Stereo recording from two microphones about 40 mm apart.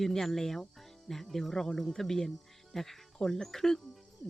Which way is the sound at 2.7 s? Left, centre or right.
Centre.